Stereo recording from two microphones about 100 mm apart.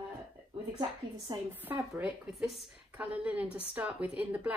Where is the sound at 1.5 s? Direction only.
20° right (ahead or behind).